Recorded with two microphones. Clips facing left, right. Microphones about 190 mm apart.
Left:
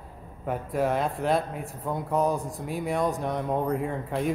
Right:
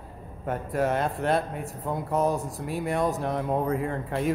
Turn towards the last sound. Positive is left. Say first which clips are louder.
# even
turn(degrees=0)  # may be behind; listen again after turning